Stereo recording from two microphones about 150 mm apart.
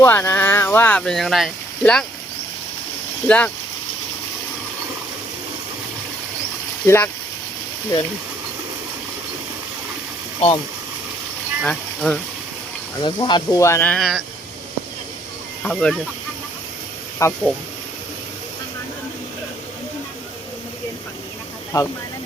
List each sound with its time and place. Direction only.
0.0 s speech: 15° left (ahead or behind)
3.2 s speech: 10° left (ahead or behind)
6.8 s speech: 15° left (ahead or behind)
10.4 s speech: 45° left (ahead or behind)
11.6 s speech: 5° left (ahead or behind)
13.0 s speech: 30° left (ahead or behind); by 14.3 s centre (ahead or behind)
15.6 s speech: 5° left (ahead or behind)
17.2 s speech: 20° left (ahead or behind)
21.7 s speech: 25° left (ahead or behind)